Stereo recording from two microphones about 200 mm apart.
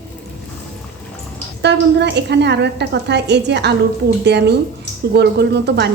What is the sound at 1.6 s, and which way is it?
A woman's voice, 60° right (ahead or behind).